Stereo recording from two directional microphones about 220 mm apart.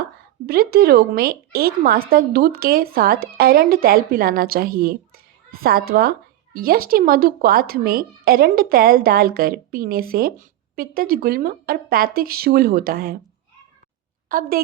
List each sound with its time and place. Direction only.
0.0 s speech: 45° right (ahead or behind)
14.3 s a woman's voice: 40° right (ahead or behind)